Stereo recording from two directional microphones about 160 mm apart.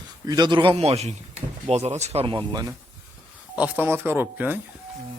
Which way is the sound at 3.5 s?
10° right (ahead or behind).